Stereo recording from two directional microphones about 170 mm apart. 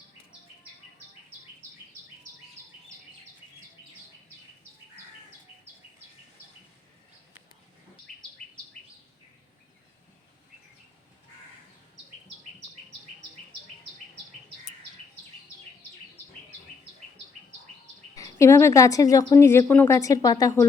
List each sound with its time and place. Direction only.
18.1 s speech: 20° left (ahead or behind)